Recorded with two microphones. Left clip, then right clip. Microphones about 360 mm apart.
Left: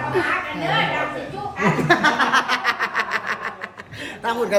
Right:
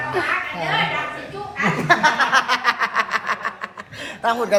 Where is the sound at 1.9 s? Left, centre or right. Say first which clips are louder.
Right 2 dB; centre.